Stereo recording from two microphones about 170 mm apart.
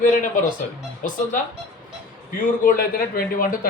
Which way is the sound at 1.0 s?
50° left (ahead or behind).